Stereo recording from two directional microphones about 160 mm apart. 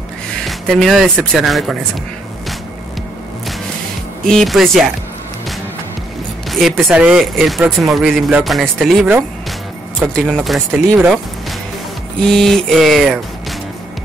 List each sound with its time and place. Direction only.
0.5 s speech: centre (ahead or behind)
4.3 s speech: centre (ahead or behind)
6.5 s speech: centre (ahead or behind)
12.2 s speech: 5° left (ahead or behind)